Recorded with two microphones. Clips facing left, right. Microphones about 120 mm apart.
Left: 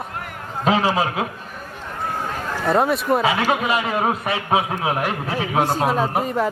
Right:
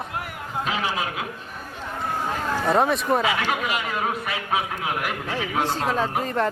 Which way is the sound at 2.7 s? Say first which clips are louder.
Left 3 dB; centre (ahead or behind).